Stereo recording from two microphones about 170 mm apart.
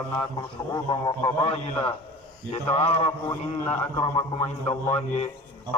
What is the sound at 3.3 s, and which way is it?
Speech, 10° left (ahead or behind).